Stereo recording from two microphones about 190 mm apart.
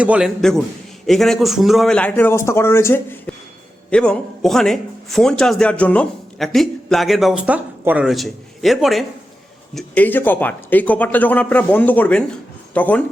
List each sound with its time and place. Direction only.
0.0 s a man's voice: 5° right (ahead or behind)